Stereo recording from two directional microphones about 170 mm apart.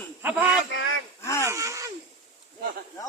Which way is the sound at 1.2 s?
15° left (ahead or behind).